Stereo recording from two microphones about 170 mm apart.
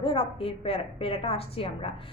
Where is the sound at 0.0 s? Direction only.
30° left (ahead or behind).